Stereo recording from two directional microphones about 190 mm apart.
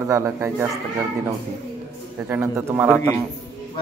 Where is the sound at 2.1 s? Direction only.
10° right (ahead or behind).